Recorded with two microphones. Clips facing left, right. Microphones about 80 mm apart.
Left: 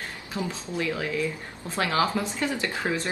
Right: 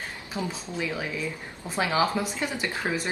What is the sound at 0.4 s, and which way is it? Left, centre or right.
Speech, centre.